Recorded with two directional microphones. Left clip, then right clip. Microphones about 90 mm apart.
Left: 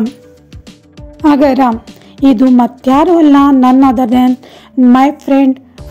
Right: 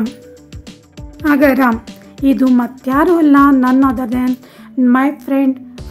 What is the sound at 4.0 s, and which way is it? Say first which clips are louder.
Speech: left 9 dB; 45° left (ahead or behind).